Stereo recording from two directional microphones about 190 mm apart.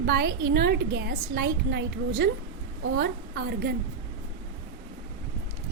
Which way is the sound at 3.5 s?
55° right (ahead or behind).